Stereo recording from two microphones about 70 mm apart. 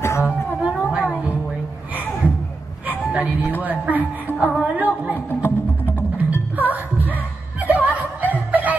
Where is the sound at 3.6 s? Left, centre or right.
Right.